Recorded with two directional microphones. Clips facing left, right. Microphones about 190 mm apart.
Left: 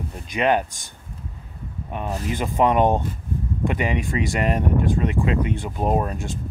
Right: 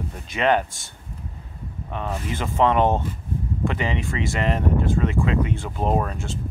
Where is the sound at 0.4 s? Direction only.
15° left (ahead or behind).